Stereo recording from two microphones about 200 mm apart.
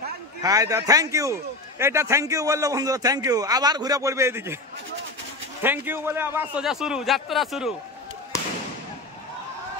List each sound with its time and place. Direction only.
0.4 s a man's voice: 15° right (ahead or behind)
5.6 s a man's voice: 10° right (ahead or behind)